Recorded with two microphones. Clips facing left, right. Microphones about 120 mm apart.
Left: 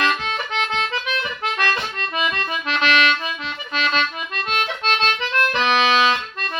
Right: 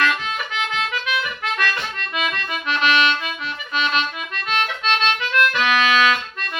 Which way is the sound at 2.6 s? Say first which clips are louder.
Right 1 dB; 40° left (ahead or behind).